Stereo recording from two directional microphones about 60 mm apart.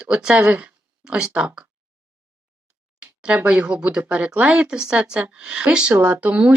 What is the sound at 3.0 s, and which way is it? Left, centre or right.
Speech, centre.